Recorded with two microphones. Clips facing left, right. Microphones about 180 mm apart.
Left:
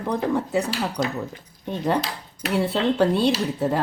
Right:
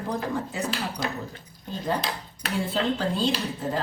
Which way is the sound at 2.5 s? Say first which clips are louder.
Left 5 dB; 65° left (ahead or behind).